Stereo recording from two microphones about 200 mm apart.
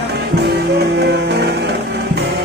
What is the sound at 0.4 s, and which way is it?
Music, 55° right (ahead or behind).